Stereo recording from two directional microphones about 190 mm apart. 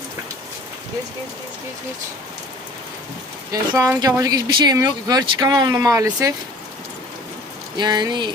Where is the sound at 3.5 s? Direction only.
15° right (ahead or behind).